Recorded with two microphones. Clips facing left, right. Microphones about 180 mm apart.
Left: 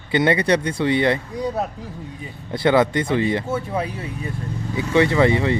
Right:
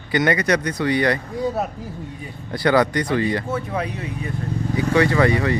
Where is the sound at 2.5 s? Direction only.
25° left (ahead or behind).